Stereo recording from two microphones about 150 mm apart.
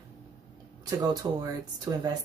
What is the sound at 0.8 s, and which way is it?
Speech, 25° right (ahead or behind).